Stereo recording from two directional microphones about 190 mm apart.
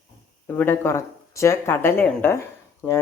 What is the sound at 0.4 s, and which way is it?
Speech, 10° left (ahead or behind).